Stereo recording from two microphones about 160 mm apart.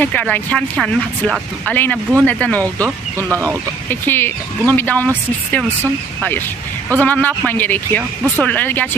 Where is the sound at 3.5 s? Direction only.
10° left (ahead or behind).